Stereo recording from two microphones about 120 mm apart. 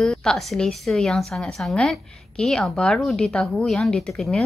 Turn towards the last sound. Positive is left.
turn(degrees=5)  # may be behind; listen again after turning